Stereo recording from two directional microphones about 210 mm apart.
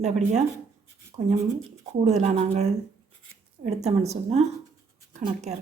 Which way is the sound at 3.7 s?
30° right (ahead or behind).